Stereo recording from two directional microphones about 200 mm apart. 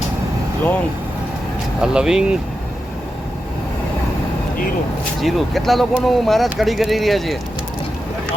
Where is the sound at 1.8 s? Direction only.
5° right (ahead or behind).